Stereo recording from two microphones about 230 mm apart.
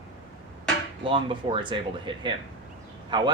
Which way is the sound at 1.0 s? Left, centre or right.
Right.